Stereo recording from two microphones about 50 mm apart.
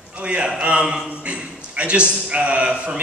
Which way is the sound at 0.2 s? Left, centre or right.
Right.